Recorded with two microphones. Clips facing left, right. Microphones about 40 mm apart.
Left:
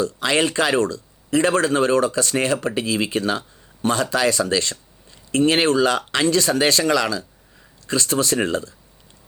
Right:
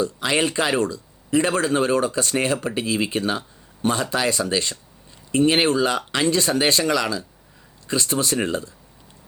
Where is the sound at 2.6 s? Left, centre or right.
Left.